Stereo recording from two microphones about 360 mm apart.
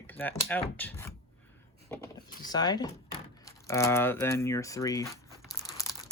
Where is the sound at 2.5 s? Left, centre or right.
Centre.